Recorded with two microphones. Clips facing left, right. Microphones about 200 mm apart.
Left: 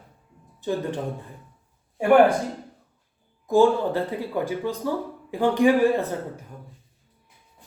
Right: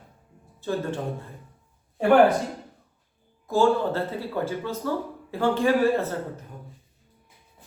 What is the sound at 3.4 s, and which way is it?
Speech, 15° left (ahead or behind).